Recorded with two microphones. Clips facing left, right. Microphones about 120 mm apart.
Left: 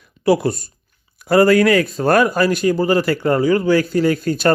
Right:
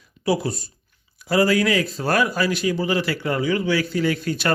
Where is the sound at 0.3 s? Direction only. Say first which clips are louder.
Left 6 dB; 60° left (ahead or behind).